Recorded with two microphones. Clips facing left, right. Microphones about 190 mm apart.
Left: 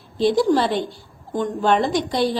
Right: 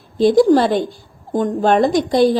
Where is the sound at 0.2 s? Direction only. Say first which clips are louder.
Right 6 dB; 45° right (ahead or behind).